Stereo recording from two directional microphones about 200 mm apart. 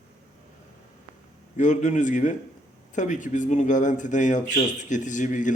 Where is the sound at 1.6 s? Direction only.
40° left (ahead or behind).